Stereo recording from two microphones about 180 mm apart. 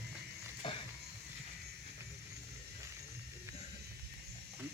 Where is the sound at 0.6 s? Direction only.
30° left (ahead or behind).